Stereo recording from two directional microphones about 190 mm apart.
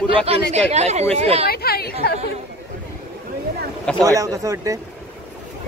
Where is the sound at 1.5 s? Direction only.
55° left (ahead or behind).